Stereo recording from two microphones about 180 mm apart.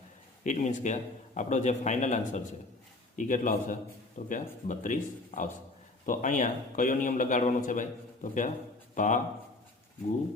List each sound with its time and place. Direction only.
0.4 s a man's voice: 45° left (ahead or behind)